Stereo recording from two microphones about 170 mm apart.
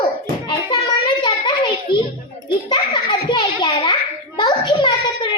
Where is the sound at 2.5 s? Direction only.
25° left (ahead or behind).